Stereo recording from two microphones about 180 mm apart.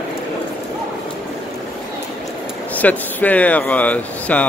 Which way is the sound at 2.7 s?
10° left (ahead or behind).